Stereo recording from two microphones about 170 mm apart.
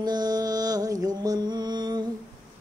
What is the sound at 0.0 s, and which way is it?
Music, 25° right (ahead or behind).